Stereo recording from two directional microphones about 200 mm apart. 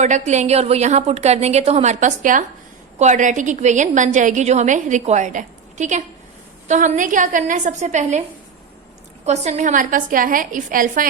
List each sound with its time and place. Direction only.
0.0 s a woman's voice: 35° right (ahead or behind)
9.2 s a woman's voice: 35° right (ahead or behind)